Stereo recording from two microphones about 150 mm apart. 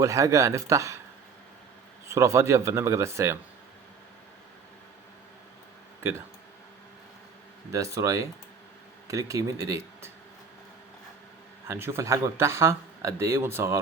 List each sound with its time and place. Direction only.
0.0 s speech: 20° right (ahead or behind)
2.0 s speech: 20° right (ahead or behind)
6.0 s speech: 15° right (ahead or behind)
7.7 s speech: 20° right (ahead or behind)
11.7 s speech: 15° right (ahead or behind)